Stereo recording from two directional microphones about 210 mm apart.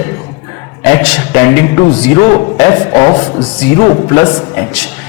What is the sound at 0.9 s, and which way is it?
Speech, 10° left (ahead or behind).